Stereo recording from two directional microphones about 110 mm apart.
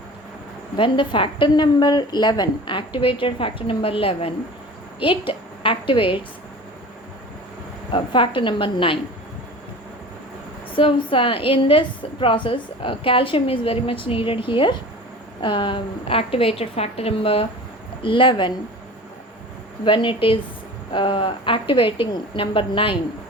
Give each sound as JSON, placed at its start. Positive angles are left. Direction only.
{"t": 0.8, "sound": "a woman's voice", "side_deg": 50}
{"t": 7.9, "sound": "a woman's voice", "side_deg": 50}
{"t": 10.8, "sound": "a woman's voice", "side_deg": 50}
{"t": 18.0, "sound": "a woman's voice", "side_deg": 50}
{"t": 19.8, "sound": "a woman's voice", "side_deg": 50}